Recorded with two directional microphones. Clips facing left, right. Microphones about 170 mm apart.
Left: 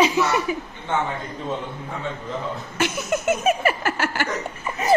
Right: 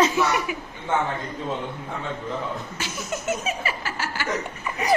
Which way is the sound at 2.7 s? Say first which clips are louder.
Left 7 dB; 60° left (ahead or behind).